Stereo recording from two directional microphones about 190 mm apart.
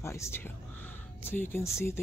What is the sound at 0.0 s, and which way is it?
Speech, 15° left (ahead or behind).